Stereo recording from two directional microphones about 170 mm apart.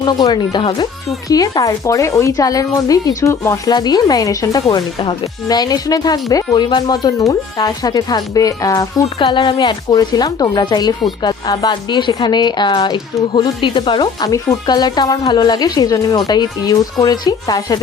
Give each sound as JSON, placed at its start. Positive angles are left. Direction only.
{"t": 0.0, "sound": "speech", "side_deg": 25}